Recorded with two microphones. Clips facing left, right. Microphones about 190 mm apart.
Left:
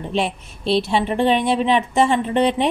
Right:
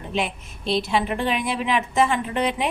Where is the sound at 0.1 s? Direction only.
30° left (ahead or behind).